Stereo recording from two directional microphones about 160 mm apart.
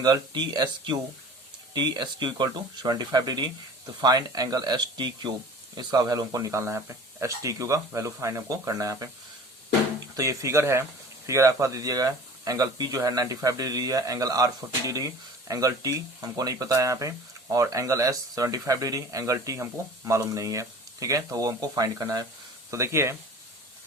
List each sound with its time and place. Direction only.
0.0 s speech: 25° right (ahead or behind)
10.2 s speech: 20° right (ahead or behind)